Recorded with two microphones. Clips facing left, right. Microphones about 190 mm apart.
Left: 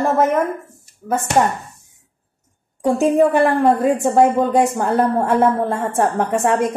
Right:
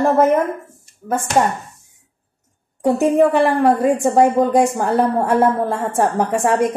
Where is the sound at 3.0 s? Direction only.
Centre (ahead or behind).